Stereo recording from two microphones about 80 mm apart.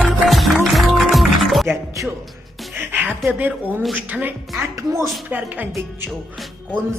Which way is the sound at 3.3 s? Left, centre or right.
Right.